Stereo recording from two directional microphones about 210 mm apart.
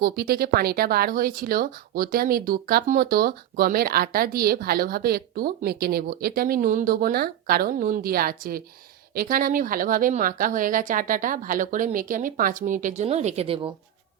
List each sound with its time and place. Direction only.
0.0 s a woman's voice: 45° right (ahead or behind); by 13.7 s 30° right (ahead or behind)